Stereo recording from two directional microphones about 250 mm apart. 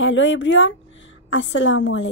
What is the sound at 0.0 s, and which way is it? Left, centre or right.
A woman's voice, left.